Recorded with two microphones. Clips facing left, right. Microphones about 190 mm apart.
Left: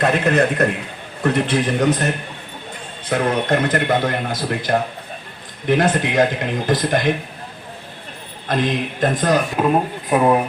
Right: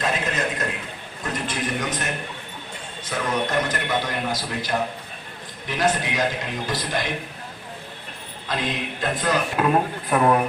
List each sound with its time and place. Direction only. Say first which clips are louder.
0.0 s a man's voice: left 9 dB; 60° left (ahead or behind)
3.1 s a man's voice: left 7 dB; 55° left (ahead or behind)
8.5 s a man's voice: left 7 dB; 50° left (ahead or behind)
9.6 s speech: left 3 dB; 15° left (ahead or behind)